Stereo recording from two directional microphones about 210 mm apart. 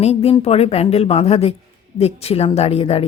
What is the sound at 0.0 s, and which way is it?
A woman's voice, 30° left (ahead or behind).